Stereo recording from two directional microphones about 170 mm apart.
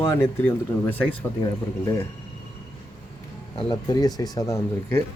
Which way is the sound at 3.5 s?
25° left (ahead or behind).